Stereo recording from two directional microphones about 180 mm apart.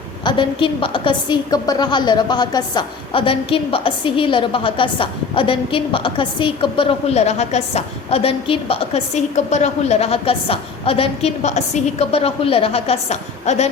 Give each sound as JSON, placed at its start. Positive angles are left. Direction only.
{"t": 0.3, "sound": "a woman's voice", "side_deg": 30}